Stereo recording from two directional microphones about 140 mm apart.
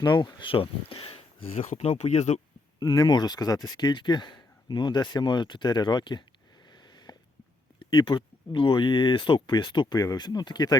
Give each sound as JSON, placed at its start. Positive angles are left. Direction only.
{"t": 0.0, "sound": "speech", "side_deg": 30}
{"t": 1.5, "sound": "speech", "side_deg": 60}
{"t": 2.7, "sound": "speech", "side_deg": 25}
{"t": 6.7, "sound": "sniff", "side_deg": 30}
{"t": 7.8, "sound": "a sound", "side_deg": 35}
{"t": 8.5, "sound": "speech", "side_deg": 35}